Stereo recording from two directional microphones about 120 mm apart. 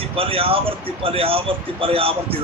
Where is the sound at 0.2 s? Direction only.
50° right (ahead or behind).